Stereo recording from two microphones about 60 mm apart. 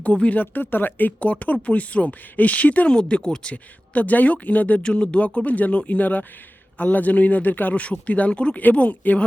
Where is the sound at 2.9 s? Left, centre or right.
Centre.